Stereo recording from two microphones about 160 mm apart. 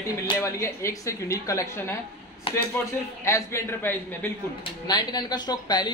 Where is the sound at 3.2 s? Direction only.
15° left (ahead or behind).